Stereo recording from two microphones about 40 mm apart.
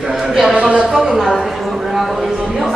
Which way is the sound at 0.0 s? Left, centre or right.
Centre.